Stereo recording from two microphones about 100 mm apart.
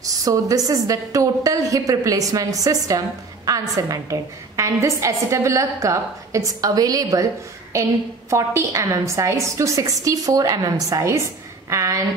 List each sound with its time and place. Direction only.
0.0 s a woman's voice: 35° right (ahead or behind)
8.3 s a woman's voice: 30° right (ahead or behind)